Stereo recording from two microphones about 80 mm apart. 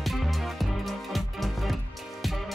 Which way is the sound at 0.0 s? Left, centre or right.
Centre.